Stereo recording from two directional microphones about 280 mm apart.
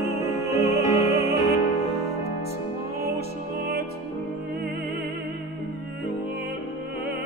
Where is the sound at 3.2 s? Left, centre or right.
Right.